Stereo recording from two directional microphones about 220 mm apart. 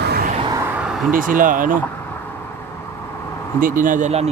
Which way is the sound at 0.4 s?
15° right (ahead or behind).